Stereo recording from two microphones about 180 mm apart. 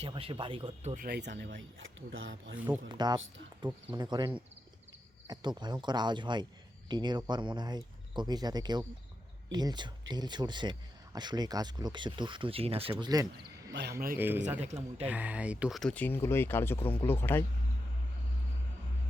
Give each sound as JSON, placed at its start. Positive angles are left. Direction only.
{"t": 0.0, "sound": "speech", "side_deg": -30}
{"t": 0.9, "sound": "speech", "side_deg": -60}
{"t": 2.6, "sound": "speech", "side_deg": -10}
{"t": 2.9, "sound": "speech", "side_deg": -25}
{"t": 5.3, "sound": "speech", "side_deg": -25}
{"t": 14.2, "sound": "speech", "side_deg": -10}
{"t": 14.6, "sound": "speech", "side_deg": -35}
{"t": 15.0, "sound": "speech", "side_deg": -10}